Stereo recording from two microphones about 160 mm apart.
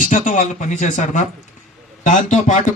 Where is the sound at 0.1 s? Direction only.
50° left (ahead or behind).